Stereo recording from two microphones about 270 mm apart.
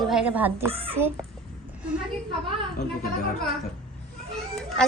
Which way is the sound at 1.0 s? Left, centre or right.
Centre.